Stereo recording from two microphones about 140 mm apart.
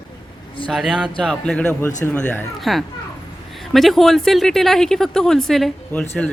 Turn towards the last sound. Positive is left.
turn(degrees=10)  # may be behind; listen again after turning